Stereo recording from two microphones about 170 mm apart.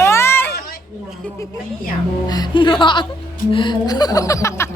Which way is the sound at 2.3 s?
25° left (ahead or behind).